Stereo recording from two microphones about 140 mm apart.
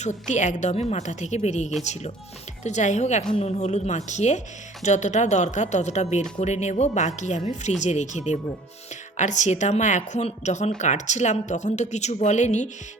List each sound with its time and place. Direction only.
0.0 s a woman's voice: 60° left (ahead or behind)